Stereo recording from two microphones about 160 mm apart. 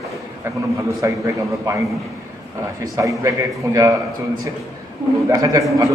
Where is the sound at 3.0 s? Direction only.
20° right (ahead or behind).